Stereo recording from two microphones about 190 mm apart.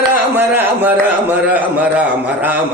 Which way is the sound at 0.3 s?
10° right (ahead or behind).